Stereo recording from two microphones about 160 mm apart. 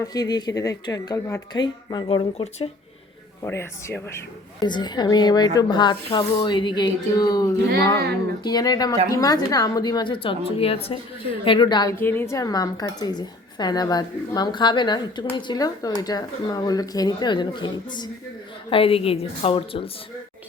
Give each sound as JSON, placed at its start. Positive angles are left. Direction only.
{"t": 0.0, "sound": "a woman's voice", "side_deg": 25}
{"t": 3.4, "sound": "speech", "side_deg": 15}
{"t": 4.6, "sound": "a woman's voice", "side_deg": 25}
{"t": 11.9, "sound": "a woman's voice", "side_deg": 15}